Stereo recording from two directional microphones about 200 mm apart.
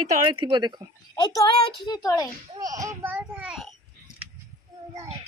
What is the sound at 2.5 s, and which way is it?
A child's voice, 20° right (ahead or behind).